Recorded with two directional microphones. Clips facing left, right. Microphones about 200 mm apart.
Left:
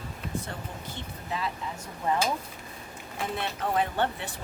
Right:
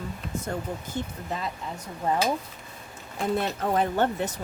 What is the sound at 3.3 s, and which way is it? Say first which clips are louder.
Speech: right 3 dB; 45° right (ahead or behind).